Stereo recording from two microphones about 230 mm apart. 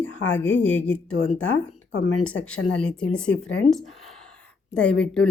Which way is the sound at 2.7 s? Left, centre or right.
Centre.